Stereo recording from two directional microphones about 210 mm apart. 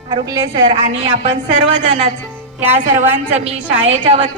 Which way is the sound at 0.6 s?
25° right (ahead or behind).